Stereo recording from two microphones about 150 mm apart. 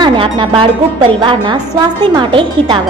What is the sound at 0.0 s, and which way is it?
A woman's voice, 35° right (ahead or behind).